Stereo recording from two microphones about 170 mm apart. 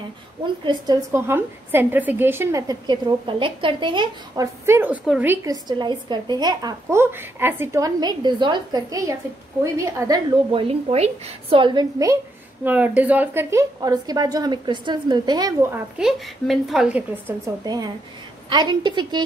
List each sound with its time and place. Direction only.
0.7 s a woman's voice: 20° right (ahead or behind)
4.6 s a woman's voice: 10° right (ahead or behind)
12.6 s a woman's voice: 10° right (ahead or behind)
15.7 s a woman's voice: centre (ahead or behind)
17.6 s a woman's voice: 25° right (ahead or behind)